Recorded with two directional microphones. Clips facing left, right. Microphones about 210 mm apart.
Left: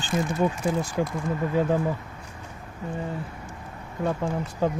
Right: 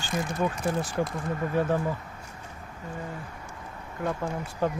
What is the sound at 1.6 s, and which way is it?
Speech, 15° left (ahead or behind).